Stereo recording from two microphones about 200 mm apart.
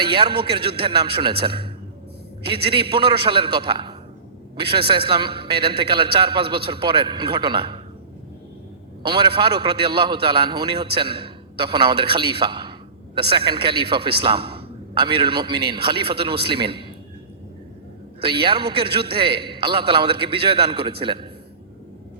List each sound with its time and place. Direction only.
0.1 s a man's voice: 25° right (ahead or behind)
9.0 s a man's voice: 25° right (ahead or behind)
18.2 s a man's voice: 25° right (ahead or behind)